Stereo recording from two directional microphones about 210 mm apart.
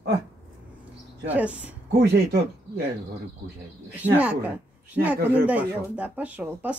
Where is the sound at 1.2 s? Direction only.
5° right (ahead or behind).